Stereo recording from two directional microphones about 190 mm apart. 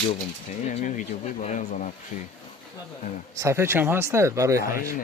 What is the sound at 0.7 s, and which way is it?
Speech, 40° left (ahead or behind).